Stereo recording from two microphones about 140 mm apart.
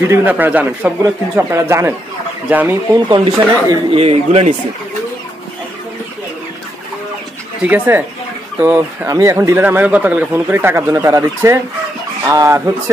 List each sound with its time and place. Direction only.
0.0 s speech: 15° right (ahead or behind)
3.3 s speech: 25° right (ahead or behind)
3.9 s a man's voice: 45° right (ahead or behind)
7.6 s speech: 15° right (ahead or behind)